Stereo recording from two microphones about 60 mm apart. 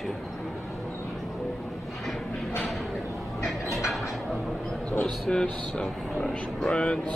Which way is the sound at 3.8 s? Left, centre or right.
Centre.